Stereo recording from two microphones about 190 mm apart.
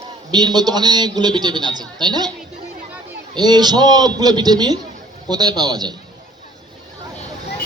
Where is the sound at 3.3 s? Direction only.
20° right (ahead or behind).